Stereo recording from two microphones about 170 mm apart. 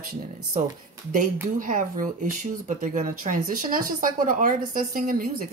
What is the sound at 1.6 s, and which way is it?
Speech, 50° right (ahead or behind).